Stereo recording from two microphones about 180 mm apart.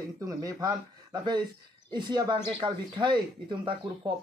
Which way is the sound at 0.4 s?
20° right (ahead or behind).